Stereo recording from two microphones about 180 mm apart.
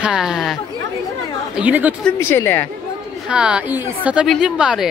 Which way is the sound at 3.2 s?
5° right (ahead or behind).